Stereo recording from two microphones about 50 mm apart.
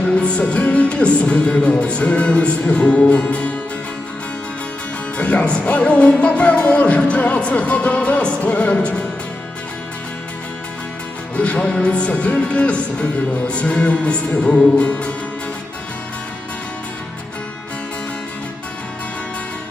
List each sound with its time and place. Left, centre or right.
0.2 s music: left
5.1 s speech: left
5.6 s music: left
11.3 s music: left